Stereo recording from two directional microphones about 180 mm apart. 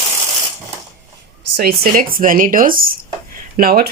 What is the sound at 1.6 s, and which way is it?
Speech, 55° right (ahead or behind).